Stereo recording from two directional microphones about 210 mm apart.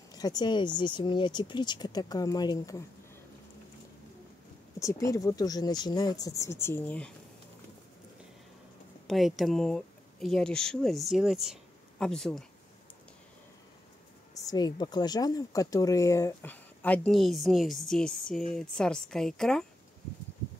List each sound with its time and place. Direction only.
0.1 s speech: 20° left (ahead or behind)
4.7 s speech: 15° left (ahead or behind)
9.0 s speech: centre (ahead or behind)
14.4 s speech: 20° left (ahead or behind); by 19.6 s centre (ahead or behind)